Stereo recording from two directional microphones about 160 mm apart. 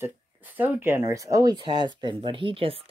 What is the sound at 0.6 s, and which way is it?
Speech, 10° right (ahead or behind).